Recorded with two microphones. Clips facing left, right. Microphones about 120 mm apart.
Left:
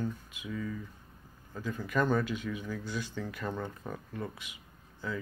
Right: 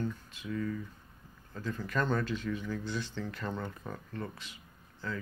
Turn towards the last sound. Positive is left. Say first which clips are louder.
# left 1 dB
turn(degrees=10)  # may be behind; listen again after turning